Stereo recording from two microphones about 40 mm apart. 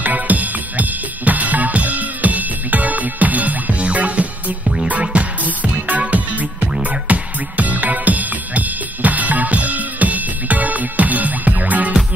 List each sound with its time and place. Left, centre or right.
0.0 s music: right